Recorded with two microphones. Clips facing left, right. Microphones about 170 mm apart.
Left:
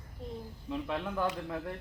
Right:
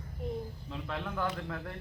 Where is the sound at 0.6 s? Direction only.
15° left (ahead or behind).